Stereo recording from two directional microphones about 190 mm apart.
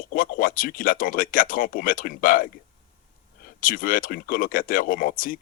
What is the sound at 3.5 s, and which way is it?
A man's voice, 45° left (ahead or behind).